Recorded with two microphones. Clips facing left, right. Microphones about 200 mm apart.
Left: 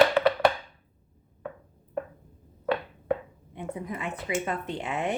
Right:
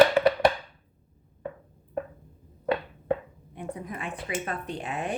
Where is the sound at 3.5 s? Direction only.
25° left (ahead or behind).